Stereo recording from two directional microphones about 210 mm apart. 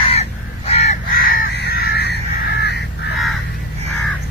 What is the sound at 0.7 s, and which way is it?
Crow, 30° left (ahead or behind).